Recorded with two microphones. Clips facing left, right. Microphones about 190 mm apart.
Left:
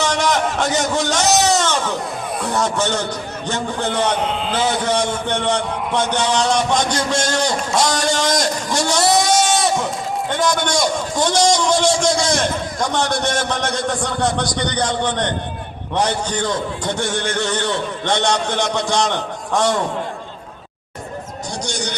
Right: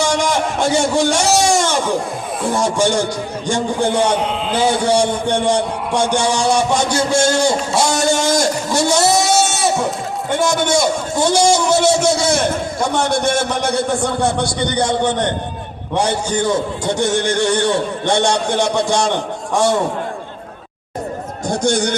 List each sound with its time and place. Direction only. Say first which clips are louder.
0.0 s a sound: right 1 dB; 10° right (ahead or behind)
2.5 s a man's voice: right 4 dB; 10° right (ahead or behind)
8.9 s sheep: even; 10° right (ahead or behind)
10.3 s a man's voice: right 4 dB; 10° right (ahead or behind)
21.5 s a man's voice: right 10 dB; 55° right (ahead or behind)